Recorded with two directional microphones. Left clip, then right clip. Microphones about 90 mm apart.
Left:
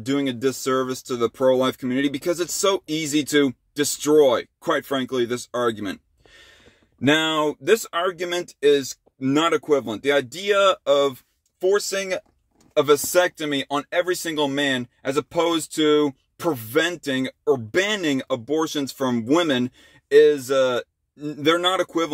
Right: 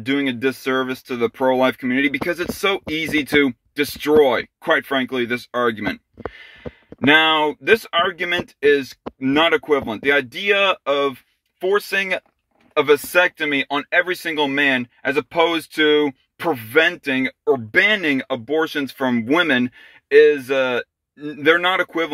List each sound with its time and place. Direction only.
0.0 s speech: 40° left (ahead or behind)
7.0 s speech: 40° left (ahead or behind)
12.8 s speech: 40° left (ahead or behind)